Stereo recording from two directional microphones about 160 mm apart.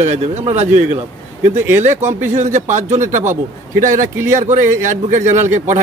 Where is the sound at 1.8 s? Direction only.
45° right (ahead or behind).